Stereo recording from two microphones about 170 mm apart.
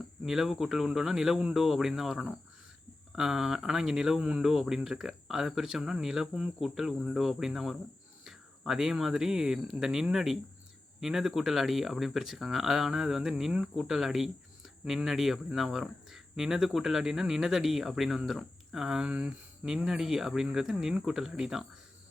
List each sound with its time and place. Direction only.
0.2 s speech: centre (ahead or behind)